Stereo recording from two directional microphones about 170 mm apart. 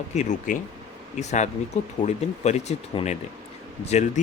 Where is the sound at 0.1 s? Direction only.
45° left (ahead or behind).